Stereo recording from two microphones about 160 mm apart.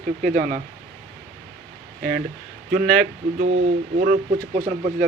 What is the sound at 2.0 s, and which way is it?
Speech, 75° right (ahead or behind).